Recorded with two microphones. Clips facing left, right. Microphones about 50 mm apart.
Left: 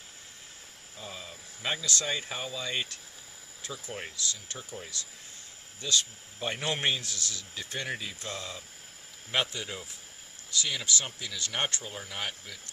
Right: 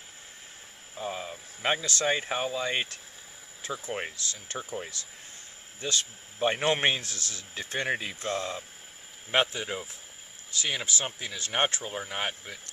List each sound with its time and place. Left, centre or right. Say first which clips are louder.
0.9 s speech: right 8 dB; right